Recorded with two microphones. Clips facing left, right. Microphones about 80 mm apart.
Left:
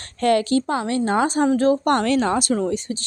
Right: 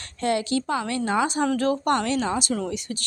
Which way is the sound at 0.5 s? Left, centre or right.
Left.